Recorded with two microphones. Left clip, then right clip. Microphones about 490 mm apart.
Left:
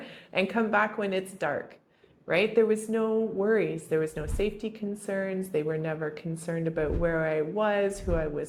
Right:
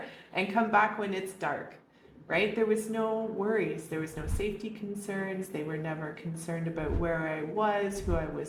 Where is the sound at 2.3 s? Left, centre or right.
Left.